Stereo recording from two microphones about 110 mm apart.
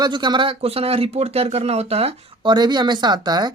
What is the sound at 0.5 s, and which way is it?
Speech, 65° right (ahead or behind).